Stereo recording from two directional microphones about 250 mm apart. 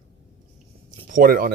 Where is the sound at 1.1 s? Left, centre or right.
Right.